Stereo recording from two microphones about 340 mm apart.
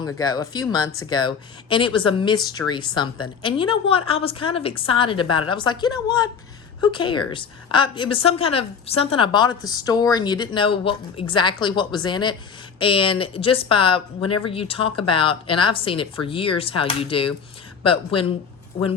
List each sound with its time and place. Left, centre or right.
0.0 s speech: centre